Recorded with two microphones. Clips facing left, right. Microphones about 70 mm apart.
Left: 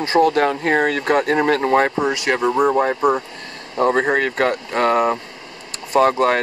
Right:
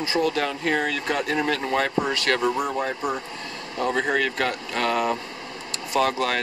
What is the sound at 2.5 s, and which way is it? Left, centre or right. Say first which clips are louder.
Speech: left 9 dB; left.